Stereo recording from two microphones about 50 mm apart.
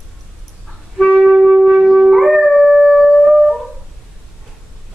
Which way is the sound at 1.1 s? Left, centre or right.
Centre.